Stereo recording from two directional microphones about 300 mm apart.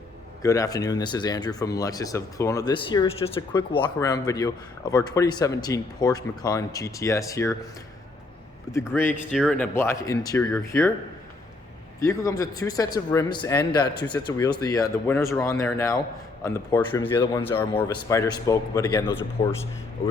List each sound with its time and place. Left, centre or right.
0.4 s speech: centre
8.8 s speech: centre
11.9 s speech: centre